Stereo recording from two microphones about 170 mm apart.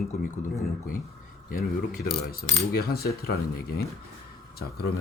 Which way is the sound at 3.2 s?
65° left (ahead or behind).